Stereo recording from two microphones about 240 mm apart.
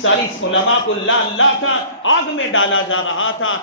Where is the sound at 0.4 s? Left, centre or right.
Left.